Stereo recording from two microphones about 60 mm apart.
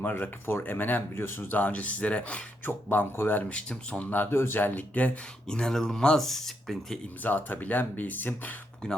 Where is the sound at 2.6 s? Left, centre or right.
Left.